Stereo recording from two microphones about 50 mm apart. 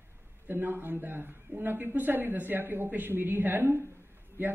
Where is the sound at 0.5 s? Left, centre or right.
Right.